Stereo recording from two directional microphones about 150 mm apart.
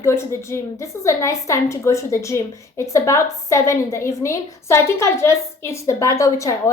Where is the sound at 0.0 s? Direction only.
15° left (ahead or behind).